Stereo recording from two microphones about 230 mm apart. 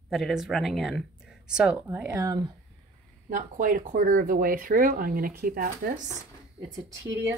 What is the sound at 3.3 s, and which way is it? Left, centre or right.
Speech, right.